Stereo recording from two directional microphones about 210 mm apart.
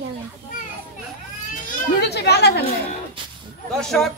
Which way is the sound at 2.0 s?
55° left (ahead or behind).